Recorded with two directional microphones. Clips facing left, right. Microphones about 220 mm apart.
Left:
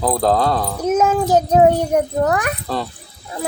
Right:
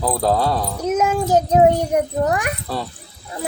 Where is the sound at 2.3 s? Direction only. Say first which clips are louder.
Left 2 dB; 10° right (ahead or behind).